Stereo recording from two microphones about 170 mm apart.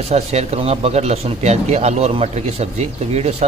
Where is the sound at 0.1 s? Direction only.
40° right (ahead or behind).